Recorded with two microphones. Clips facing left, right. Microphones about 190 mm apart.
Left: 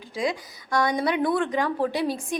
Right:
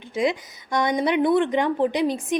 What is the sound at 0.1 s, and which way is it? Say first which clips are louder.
Speech: right 4 dB; 20° right (ahead or behind).